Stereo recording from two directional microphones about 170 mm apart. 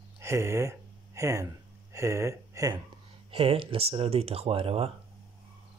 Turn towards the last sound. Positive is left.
turn(degrees=-35)  # may be behind; listen again after turning